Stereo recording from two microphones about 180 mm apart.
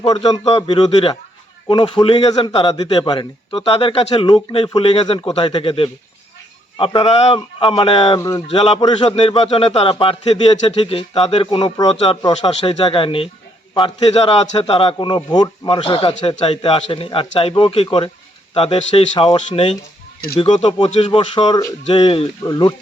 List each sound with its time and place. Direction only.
0.0 s a man's voice: 25° left (ahead or behind)
8.4 s a man's voice: 35° left (ahead or behind)
12.5 s a man's voice: 35° left (ahead or behind)